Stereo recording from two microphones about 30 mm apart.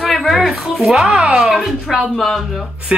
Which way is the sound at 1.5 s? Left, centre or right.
Centre.